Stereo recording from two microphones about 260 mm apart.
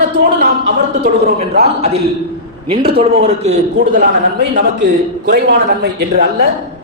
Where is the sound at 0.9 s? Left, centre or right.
Right.